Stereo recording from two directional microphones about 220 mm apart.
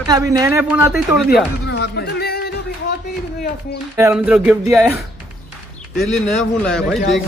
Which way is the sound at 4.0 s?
10° right (ahead or behind).